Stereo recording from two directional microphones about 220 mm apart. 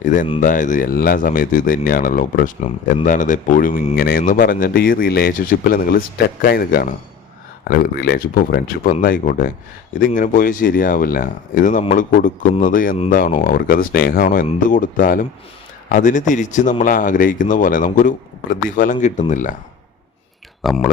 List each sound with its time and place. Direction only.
0.0 s speech: 35° left (ahead or behind)
20.7 s speech: centre (ahead or behind)